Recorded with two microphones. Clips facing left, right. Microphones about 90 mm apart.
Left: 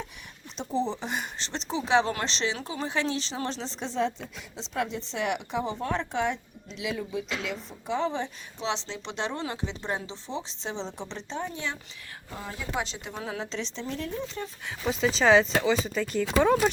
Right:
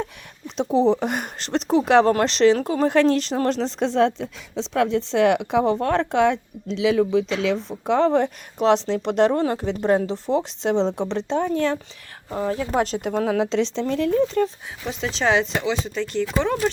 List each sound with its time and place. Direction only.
0.0 s speech: 65° right (ahead or behind)
4.7 s speech: 90° right
7.4 s speech: 80° right; by 11.8 s 55° right (ahead or behind)
12.3 s speech: 45° right (ahead or behind); by 14.4 s 90° right
14.8 s speech: centre (ahead or behind)